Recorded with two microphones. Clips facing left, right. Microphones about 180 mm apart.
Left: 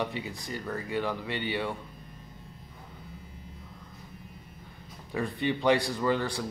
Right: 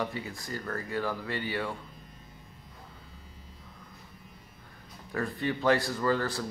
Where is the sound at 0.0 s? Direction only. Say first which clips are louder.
Left 1 dB; 20° left (ahead or behind).